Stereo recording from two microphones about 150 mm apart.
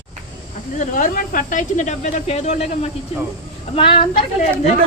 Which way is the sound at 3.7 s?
35° left (ahead or behind).